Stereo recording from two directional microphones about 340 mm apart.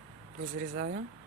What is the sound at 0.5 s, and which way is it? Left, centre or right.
Speech, right.